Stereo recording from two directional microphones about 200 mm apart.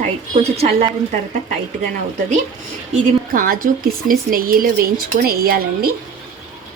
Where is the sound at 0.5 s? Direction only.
30° right (ahead or behind).